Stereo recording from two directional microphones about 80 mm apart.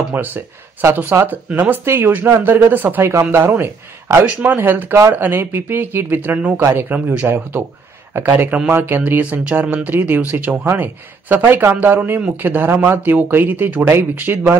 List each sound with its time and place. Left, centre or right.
0.1 s speech: right